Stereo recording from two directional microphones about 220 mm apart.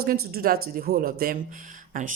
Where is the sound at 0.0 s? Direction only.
45° right (ahead or behind).